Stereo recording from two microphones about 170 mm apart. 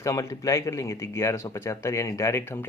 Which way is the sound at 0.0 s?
20° left (ahead or behind).